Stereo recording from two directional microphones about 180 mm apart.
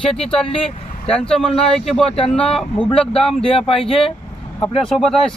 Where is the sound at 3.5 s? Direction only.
30° left (ahead or behind).